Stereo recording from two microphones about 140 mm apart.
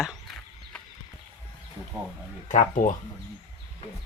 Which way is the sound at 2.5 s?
65° left (ahead or behind).